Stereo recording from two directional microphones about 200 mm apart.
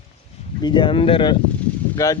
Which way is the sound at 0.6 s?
25° left (ahead or behind).